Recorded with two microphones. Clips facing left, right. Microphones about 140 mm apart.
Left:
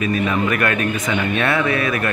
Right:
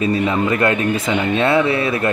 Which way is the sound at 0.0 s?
25° right (ahead or behind).